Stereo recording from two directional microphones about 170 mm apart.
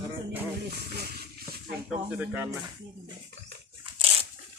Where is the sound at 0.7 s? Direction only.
65° right (ahead or behind).